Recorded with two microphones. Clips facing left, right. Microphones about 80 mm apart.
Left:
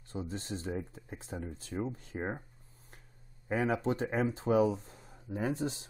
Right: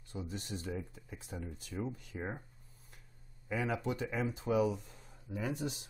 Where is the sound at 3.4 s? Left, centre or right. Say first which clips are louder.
Left 5 dB; left.